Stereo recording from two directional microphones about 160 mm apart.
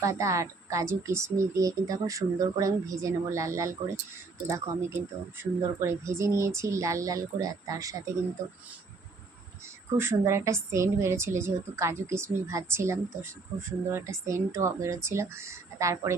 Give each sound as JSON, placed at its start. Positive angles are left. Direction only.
{"t": 0.0, "sound": "a woman's voice", "side_deg": -20}
{"t": 10.0, "sound": "a woman's voice", "side_deg": -15}